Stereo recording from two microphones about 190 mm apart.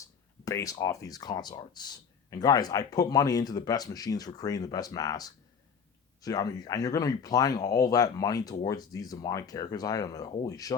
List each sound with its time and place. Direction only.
0.0 s speech: 15° left (ahead or behind)